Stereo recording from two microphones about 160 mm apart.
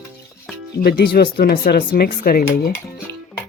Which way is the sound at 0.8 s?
85° left.